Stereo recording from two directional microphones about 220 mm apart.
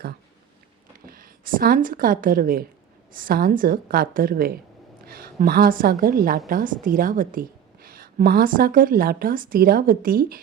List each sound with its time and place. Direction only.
1.0 s a woman's voice: 40° right (ahead or behind)